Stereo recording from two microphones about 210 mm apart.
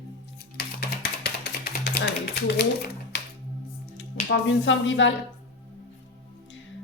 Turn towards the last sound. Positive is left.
turn(degrees=60)  # may be behind; listen again after turning